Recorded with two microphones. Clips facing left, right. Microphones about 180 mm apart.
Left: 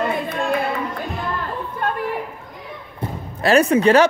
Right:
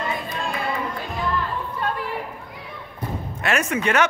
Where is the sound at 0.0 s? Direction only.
60° left (ahead or behind).